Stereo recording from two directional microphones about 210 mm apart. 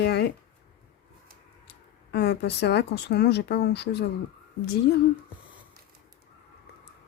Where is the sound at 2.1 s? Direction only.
55° left (ahead or behind).